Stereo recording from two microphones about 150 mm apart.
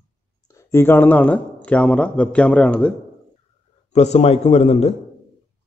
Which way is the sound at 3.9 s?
45° left (ahead or behind).